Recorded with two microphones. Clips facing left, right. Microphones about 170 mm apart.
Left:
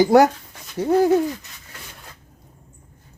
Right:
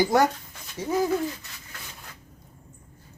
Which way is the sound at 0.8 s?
65° left (ahead or behind).